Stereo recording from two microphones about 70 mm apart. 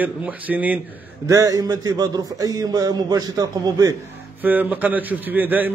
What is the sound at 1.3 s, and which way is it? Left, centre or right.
Speech, right.